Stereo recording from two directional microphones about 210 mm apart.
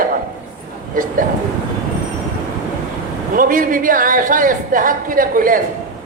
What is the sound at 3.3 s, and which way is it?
A man's voice, 40° right (ahead or behind).